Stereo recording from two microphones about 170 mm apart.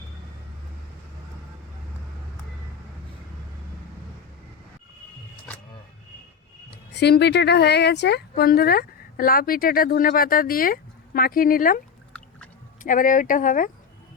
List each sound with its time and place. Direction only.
6.9 s speech: 80° left; by 11.8 s 55° left (ahead or behind)
12.8 s speech: 50° left (ahead or behind)